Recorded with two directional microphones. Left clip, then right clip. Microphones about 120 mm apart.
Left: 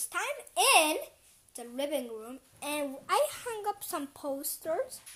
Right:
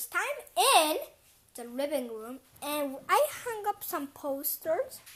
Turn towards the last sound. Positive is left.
turn(degrees=20)  # may be behind; listen again after turning